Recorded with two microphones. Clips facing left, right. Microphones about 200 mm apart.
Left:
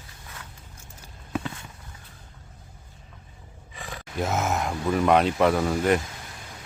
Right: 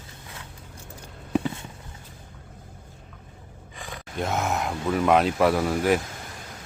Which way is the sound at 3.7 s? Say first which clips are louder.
Left 1 dB; centre (ahead or behind).